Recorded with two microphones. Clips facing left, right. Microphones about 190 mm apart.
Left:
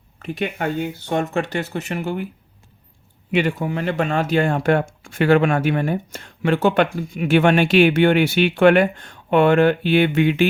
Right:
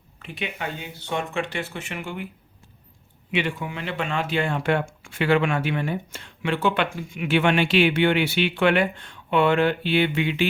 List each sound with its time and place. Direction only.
0.2 s speech: 45° left (ahead or behind)
3.3 s speech: 40° left (ahead or behind)